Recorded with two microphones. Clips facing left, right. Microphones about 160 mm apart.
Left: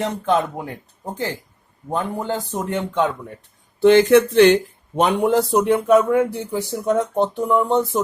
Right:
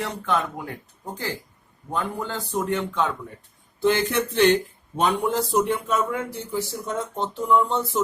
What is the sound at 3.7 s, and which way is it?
Speech, 85° left.